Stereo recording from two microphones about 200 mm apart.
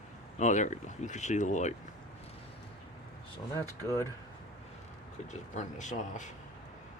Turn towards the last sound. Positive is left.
turn(degrees=40)  # may be behind; listen again after turning